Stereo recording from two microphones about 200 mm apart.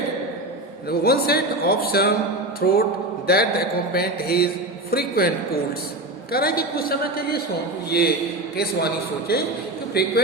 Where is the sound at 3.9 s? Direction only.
50° left (ahead or behind).